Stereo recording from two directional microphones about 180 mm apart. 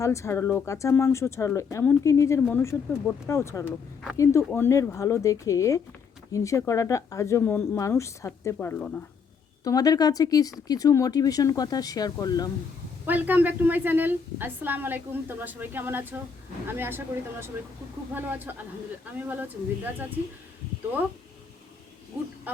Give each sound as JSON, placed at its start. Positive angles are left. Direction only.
{"t": 0.0, "sound": "speech", "side_deg": 15}
{"t": 9.6, "sound": "speech", "side_deg": 20}
{"t": 13.1, "sound": "a woman's voice", "side_deg": -10}
{"t": 18.1, "sound": "a woman's voice", "side_deg": -10}